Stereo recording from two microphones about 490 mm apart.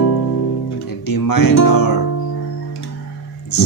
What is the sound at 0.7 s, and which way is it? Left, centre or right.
Guitar, left.